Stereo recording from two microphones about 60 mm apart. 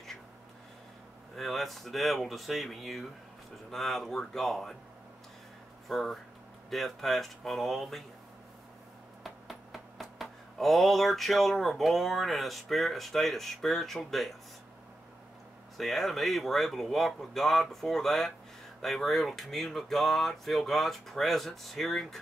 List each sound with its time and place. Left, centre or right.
1.3 s speech: centre
5.9 s speech: centre
9.2 s a sound: centre
15.8 s speech: centre